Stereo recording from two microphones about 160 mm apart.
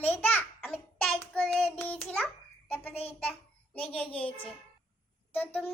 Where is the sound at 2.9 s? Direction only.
40° left (ahead or behind).